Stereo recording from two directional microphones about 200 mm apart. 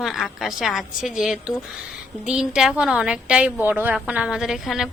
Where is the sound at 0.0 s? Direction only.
Centre (ahead or behind).